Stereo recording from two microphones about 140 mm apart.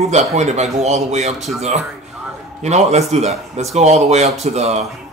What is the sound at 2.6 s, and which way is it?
A man's voice, 55° right (ahead or behind).